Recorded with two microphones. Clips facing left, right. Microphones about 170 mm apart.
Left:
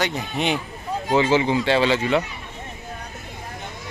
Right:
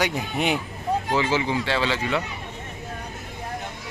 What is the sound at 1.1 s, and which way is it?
Speech, 25° left (ahead or behind).